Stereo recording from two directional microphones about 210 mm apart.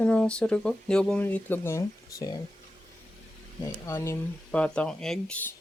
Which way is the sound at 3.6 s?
10° left (ahead or behind).